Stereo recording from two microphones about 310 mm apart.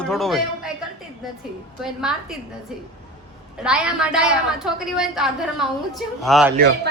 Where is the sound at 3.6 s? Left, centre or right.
Centre.